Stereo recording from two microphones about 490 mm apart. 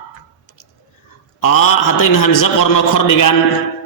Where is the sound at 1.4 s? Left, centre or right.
Left.